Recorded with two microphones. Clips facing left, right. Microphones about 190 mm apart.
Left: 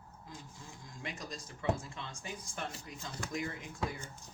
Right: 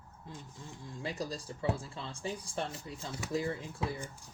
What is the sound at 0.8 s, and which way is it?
Speech, 30° right (ahead or behind).